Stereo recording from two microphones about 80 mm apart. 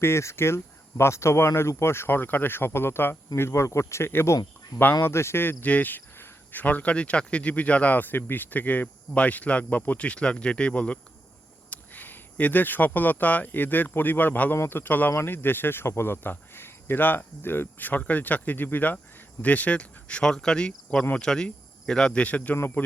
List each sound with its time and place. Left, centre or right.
0.0 s speech: left
19.4 s cricket: centre
21.2 s speech: centre
22.5 s speech: left